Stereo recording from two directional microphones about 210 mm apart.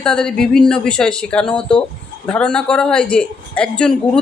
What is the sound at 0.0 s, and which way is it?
A woman's voice, 5° left (ahead or behind).